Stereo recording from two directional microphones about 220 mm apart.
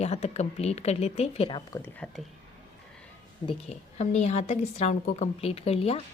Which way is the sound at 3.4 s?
30° left (ahead or behind).